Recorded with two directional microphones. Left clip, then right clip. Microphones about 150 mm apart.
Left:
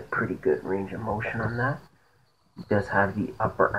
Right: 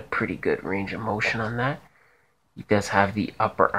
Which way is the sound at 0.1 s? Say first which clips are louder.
Even; 30° right (ahead or behind).